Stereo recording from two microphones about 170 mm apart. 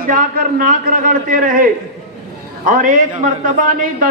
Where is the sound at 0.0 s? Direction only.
55° right (ahead or behind).